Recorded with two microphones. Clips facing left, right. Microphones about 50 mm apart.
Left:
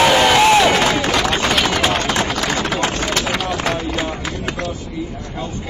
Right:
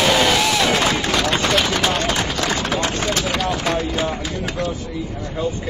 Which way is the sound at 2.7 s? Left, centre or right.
Left.